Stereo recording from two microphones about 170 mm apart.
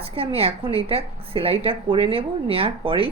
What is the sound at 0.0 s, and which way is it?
A woman's voice, 35° right (ahead or behind).